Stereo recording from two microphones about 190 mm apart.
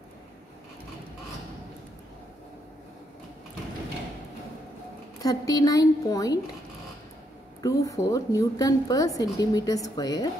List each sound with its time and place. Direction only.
5.2 s a woman's voice: 20° left (ahead or behind)
7.6 s a woman's voice: 20° left (ahead or behind)